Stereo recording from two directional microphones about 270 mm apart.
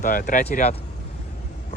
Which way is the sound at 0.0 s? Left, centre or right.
Left.